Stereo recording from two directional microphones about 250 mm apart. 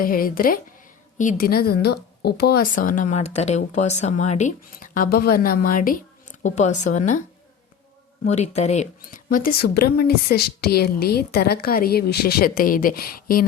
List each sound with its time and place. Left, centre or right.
0.0 s a woman's voice: left
8.2 s a woman's voice: left